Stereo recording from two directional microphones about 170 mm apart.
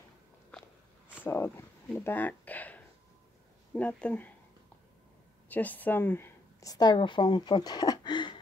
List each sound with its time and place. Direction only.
1.2 s speech: 10° left (ahead or behind)
5.5 s a woman's voice: 10° left (ahead or behind); by 8.4 s 25° left (ahead or behind)